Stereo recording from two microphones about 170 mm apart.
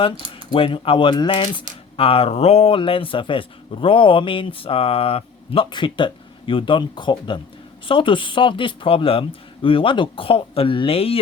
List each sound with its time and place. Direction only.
0.5 s speech: 30° left (ahead or behind)